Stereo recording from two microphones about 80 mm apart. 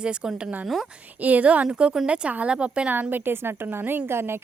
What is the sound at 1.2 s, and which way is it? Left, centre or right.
A woman's voice, centre.